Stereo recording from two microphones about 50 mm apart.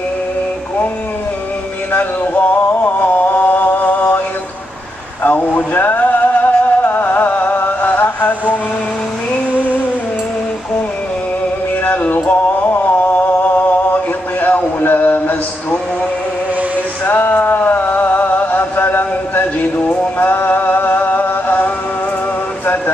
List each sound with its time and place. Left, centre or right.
1.9 s music: left
5.2 s a sound: left
5.9 s music: left
11.8 s music: left
12.3 s a sound: left
17.0 s music: left
19.8 s music: left
20.2 s music: left